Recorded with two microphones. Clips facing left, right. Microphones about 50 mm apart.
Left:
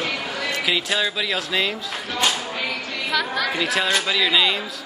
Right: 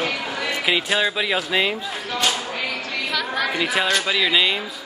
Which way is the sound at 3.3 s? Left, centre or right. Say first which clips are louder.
Right 1 dB; centre.